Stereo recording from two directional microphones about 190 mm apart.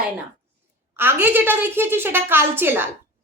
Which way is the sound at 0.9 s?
10° right (ahead or behind).